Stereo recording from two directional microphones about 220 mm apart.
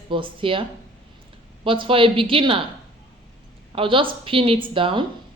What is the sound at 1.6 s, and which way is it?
Speech, 25° right (ahead or behind).